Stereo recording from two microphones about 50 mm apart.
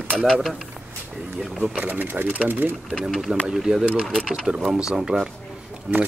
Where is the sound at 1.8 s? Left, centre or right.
Right.